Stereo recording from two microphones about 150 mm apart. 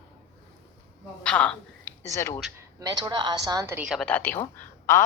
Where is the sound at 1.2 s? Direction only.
5° left (ahead or behind).